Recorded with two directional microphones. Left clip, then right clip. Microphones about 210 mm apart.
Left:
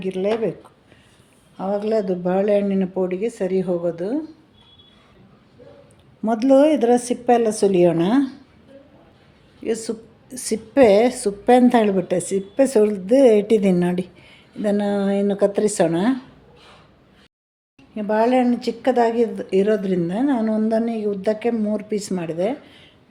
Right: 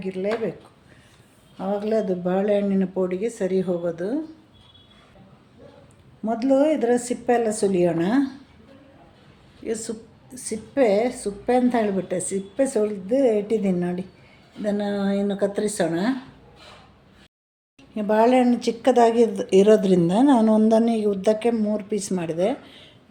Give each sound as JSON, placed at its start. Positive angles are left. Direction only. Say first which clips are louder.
{"t": 0.0, "sound": "a woman's voice", "louder": "left 4 dB", "side_deg": 30}
{"t": 1.5, "sound": "speech", "louder": "left 2 dB", "side_deg": 25}
{"t": 6.2, "sound": "speech", "louder": "left 5 dB", "side_deg": 35}
{"t": 9.6, "sound": "a woman's voice", "louder": "left 4 dB", "side_deg": 35}
{"t": 17.9, "sound": "speech", "louder": "even", "side_deg": 0}
{"t": 21.6, "sound": "speech", "louder": "left 1 dB", "side_deg": 10}